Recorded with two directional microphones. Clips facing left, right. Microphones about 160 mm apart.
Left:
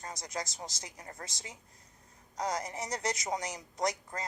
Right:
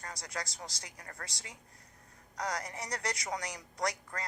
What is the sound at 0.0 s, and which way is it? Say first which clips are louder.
A woman's voice: left 3 dB; 20° left (ahead or behind).